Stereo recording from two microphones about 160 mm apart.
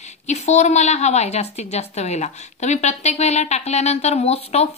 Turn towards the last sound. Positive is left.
turn(degrees=40)  # may be behind; listen again after turning